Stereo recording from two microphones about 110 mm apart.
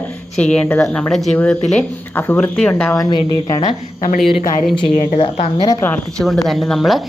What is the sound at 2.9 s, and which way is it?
Speech, 35° left (ahead or behind).